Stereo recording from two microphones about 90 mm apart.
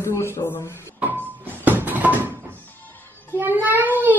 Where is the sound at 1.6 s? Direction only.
20° right (ahead or behind).